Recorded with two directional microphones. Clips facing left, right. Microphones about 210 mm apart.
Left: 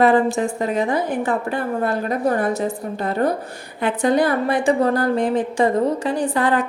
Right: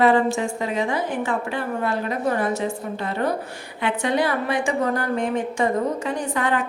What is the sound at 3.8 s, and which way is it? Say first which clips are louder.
A woman's voice: left 4 dB; 40° left (ahead or behind).